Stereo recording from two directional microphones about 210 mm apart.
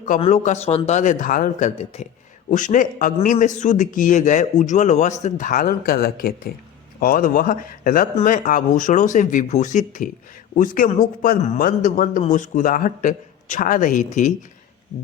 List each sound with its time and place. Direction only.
0.2 s a man's voice: 30° left (ahead or behind)